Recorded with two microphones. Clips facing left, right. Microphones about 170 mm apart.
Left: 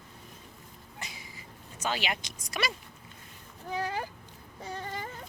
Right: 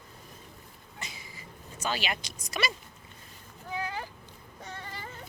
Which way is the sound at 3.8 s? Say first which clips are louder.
Left 3 dB; 40° left (ahead or behind).